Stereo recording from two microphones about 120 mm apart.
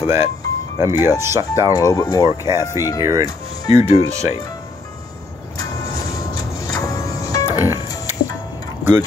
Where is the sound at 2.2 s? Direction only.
25° right (ahead or behind).